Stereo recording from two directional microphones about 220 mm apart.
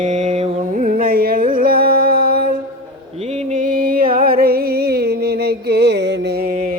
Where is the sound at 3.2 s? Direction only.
30° right (ahead or behind).